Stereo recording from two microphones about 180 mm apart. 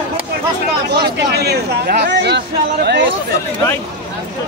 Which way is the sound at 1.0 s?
65° right (ahead or behind).